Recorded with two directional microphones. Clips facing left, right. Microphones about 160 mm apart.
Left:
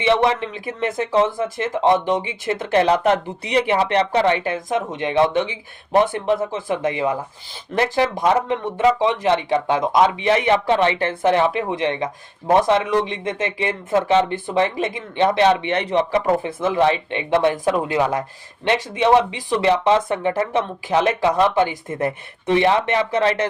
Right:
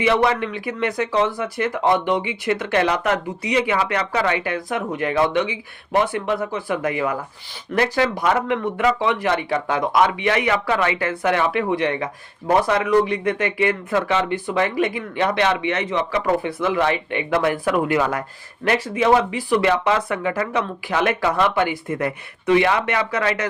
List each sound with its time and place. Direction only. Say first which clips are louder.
0.0 s speech: left 1 dB; 30° left (ahead or behind)